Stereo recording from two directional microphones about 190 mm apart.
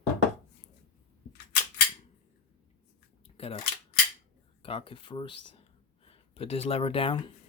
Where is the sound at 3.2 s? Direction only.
30° left (ahead or behind).